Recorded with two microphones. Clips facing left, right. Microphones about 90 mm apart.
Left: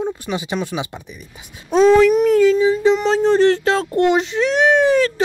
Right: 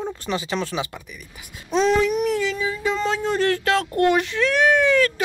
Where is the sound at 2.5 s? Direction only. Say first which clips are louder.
Left 10 dB; 25° left (ahead or behind).